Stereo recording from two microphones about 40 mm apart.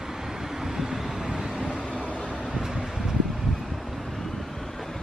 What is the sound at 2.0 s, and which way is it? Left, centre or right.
Vehicle, left.